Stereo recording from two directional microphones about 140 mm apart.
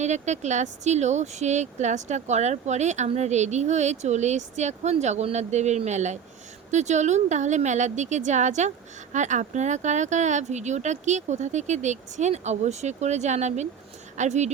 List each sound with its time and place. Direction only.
0.0 s speech: 55° right (ahead or behind)